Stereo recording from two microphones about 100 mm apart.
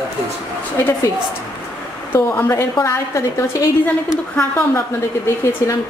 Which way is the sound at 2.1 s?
25° left (ahead or behind).